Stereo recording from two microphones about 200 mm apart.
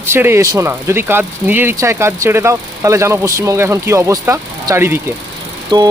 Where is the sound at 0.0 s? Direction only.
10° right (ahead or behind).